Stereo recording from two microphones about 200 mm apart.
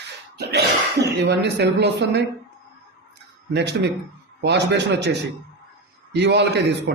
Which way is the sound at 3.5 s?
60° right (ahead or behind).